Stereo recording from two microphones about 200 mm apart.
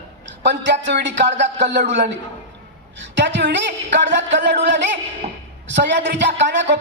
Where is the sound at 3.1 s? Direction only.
65° right (ahead or behind).